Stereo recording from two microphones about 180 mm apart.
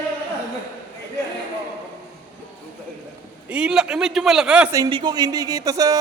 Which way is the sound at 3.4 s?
5° right (ahead or behind).